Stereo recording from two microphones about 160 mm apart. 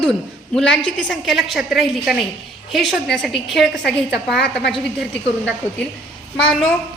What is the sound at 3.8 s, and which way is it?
Speech, 90° left.